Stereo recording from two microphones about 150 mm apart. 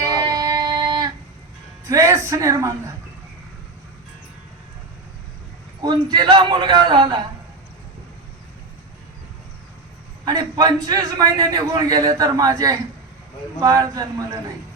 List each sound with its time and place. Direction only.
0.1 s music: 25° right (ahead or behind)
1.9 s speech: 20° right (ahead or behind)
5.8 s a man's voice: 30° right (ahead or behind)
10.2 s a man's voice: 25° right (ahead or behind)